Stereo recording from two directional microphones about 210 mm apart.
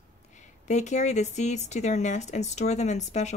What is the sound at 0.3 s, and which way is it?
Speech, 35° left (ahead or behind).